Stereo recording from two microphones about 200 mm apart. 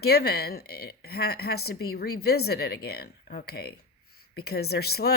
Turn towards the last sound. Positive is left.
turn(degrees=50)  # may be behind; listen again after turning